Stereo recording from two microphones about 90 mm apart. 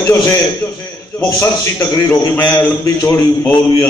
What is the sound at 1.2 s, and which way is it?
Speech, 45° left (ahead or behind).